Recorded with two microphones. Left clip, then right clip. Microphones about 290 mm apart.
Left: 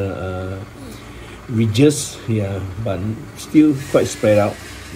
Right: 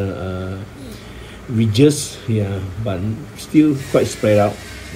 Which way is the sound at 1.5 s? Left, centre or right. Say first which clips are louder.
Right 1 dB; centre.